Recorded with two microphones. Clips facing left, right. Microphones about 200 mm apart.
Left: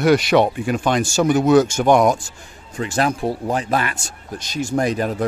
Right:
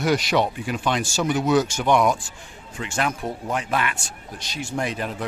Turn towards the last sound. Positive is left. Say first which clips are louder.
# left 7 dB
turn(degrees=40)  # may be behind; listen again after turning